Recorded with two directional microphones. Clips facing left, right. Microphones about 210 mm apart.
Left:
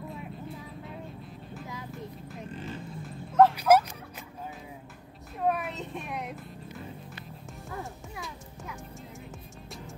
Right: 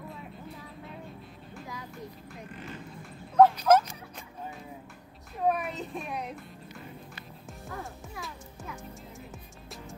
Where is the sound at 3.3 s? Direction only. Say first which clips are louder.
Even; 5° left (ahead or behind).